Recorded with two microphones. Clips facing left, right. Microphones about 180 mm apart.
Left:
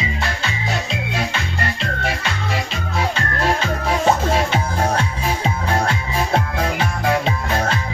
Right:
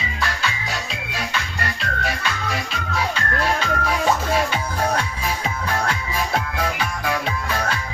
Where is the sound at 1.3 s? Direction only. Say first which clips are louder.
Left 3 dB; 25° left (ahead or behind).